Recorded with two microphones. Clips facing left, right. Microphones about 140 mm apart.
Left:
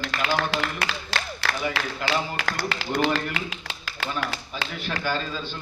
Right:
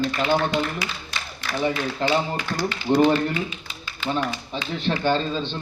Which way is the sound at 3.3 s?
90° left.